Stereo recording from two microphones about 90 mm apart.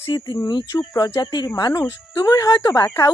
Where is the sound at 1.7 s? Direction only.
30° left (ahead or behind).